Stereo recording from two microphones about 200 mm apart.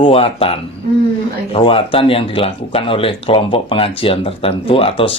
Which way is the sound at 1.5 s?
25° left (ahead or behind).